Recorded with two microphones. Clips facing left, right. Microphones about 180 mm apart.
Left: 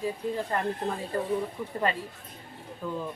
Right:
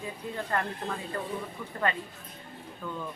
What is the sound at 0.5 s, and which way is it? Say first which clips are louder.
Speech: right 2 dB; 15° left (ahead or behind).